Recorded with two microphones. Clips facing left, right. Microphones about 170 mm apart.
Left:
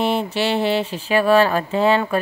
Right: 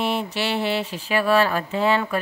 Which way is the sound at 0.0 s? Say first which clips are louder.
Left 4 dB; 30° left (ahead or behind).